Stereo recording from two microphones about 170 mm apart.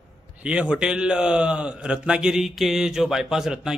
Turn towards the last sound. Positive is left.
turn(degrees=-5)  # may be behind; listen again after turning